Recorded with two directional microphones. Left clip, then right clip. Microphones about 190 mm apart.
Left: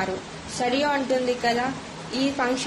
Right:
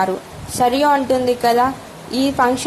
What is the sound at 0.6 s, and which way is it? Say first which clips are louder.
A woman's voice: right 9 dB; 35° right (ahead or behind).